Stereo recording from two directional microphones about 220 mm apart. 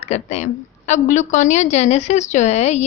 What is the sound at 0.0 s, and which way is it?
Speech, 30° left (ahead or behind).